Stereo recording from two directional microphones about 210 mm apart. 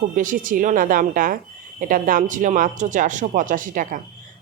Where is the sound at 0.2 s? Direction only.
40° right (ahead or behind).